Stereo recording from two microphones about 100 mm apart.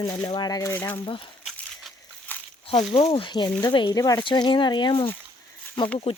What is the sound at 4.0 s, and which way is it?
Speech, 35° left (ahead or behind).